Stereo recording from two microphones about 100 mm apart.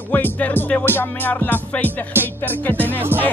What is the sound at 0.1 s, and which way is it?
Music, 15° left (ahead or behind).